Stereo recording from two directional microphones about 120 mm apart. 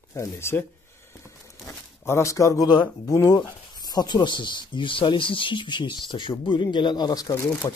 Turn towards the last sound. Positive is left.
turn(degrees=30)  # may be behind; listen again after turning